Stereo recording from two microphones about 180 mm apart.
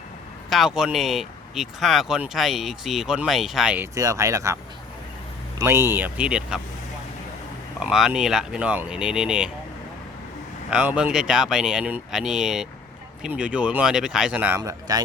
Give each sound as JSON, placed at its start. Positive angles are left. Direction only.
{"t": 0.5, "sound": "speech", "side_deg": 0}
{"t": 3.9, "sound": "speech", "side_deg": -20}
{"t": 5.5, "sound": "speech", "side_deg": -15}
{"t": 7.8, "sound": "speech", "side_deg": 0}
{"t": 10.7, "sound": "speech", "side_deg": -5}